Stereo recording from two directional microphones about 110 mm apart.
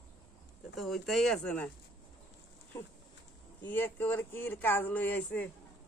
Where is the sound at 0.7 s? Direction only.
Centre (ahead or behind).